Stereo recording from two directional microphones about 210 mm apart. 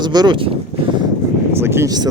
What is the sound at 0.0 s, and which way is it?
Speech, 20° right (ahead or behind).